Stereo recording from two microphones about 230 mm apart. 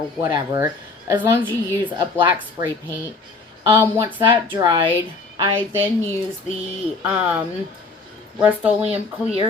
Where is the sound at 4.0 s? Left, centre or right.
Centre.